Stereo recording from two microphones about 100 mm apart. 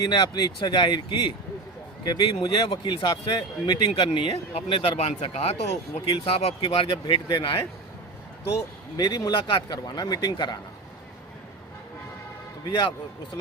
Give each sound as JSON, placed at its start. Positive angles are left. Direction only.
{"t": 0.0, "sound": "speech", "side_deg": 45}
{"t": 3.2, "sound": "speech", "side_deg": 45}
{"t": 3.9, "sound": "speech", "side_deg": 60}
{"t": 6.1, "sound": "speech", "side_deg": 70}
{"t": 9.0, "sound": "speech", "side_deg": 40}